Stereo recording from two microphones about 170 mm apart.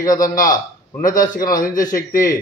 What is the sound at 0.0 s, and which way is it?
Speech, 20° left (ahead or behind).